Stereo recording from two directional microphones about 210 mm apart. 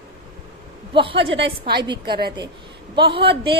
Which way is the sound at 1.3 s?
60° right (ahead or behind).